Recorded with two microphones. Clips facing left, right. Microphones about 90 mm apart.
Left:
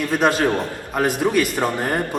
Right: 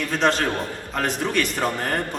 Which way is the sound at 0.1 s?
15° left (ahead or behind).